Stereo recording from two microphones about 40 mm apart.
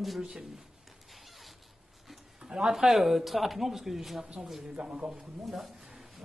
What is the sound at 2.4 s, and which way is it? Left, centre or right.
Speech, centre.